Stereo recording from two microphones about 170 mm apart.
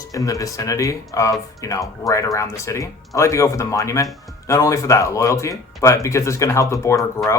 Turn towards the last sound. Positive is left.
turn(degrees=15)  # may be behind; listen again after turning